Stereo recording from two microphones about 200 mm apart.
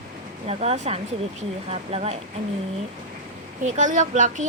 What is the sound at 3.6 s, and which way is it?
Speech, 35° right (ahead or behind).